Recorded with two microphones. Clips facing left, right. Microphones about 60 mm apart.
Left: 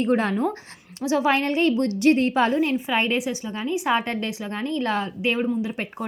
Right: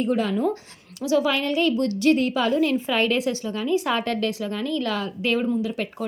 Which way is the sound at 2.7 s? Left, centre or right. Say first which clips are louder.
Right 1 dB; centre.